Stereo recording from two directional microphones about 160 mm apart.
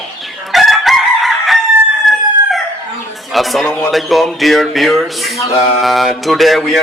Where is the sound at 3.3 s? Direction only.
Centre (ahead or behind).